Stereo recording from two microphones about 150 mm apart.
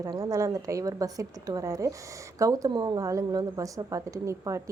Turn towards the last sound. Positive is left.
turn(degrees=-20)  # may be behind; listen again after turning